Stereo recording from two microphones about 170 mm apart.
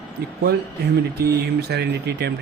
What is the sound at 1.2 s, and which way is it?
A man's voice, 70° right (ahead or behind).